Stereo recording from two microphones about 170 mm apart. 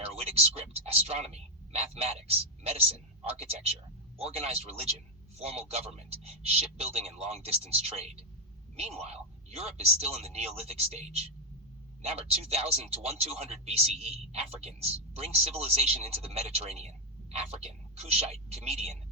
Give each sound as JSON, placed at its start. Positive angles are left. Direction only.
{"t": 0.0, "sound": "speech", "side_deg": -35}